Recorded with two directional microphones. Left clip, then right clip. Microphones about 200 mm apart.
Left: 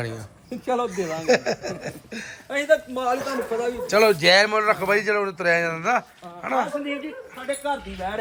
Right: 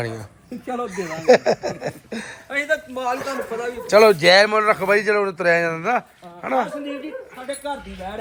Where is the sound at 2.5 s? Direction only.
60° left (ahead or behind).